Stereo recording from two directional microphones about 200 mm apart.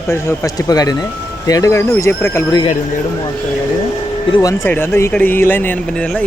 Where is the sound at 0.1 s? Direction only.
15° left (ahead or behind).